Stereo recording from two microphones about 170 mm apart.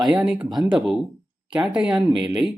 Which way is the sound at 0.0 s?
Centre (ahead or behind).